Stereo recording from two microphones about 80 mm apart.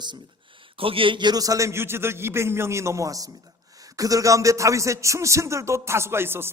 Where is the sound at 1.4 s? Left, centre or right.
Right.